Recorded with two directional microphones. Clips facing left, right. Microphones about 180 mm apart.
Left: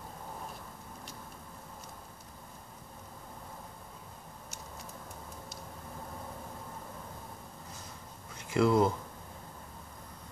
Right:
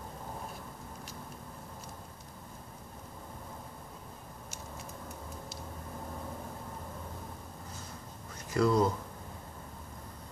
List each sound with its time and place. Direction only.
8.6 s speech: 20° left (ahead or behind)